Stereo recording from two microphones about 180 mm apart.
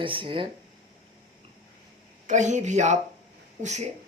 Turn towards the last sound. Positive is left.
turn(degrees=-40)  # may be behind; listen again after turning